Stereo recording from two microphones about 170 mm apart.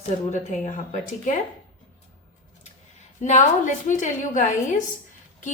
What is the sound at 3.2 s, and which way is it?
A woman's voice, 45° left (ahead or behind).